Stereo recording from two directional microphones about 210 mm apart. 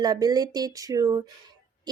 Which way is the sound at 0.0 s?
20° right (ahead or behind).